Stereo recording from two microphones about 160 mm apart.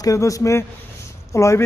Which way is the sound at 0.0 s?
20° left (ahead or behind).